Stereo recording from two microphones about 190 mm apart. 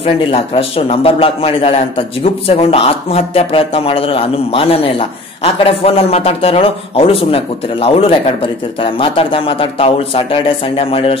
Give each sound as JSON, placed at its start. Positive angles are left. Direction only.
{"t": 0.0, "sound": "a man's voice", "side_deg": 30}